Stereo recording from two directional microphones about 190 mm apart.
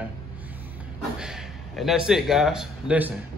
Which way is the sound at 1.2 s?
5° right (ahead or behind).